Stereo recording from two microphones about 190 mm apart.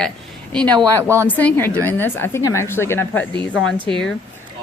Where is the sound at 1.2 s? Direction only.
10° left (ahead or behind).